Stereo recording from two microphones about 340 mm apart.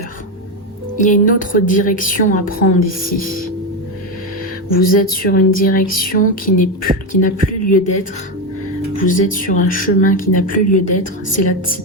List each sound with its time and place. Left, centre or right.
0.9 s a woman's voice: left
4.7 s a woman's voice: left
9.0 s a woman's voice: left